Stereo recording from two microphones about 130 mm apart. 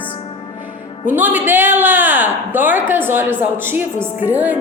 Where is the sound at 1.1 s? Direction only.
15° right (ahead or behind).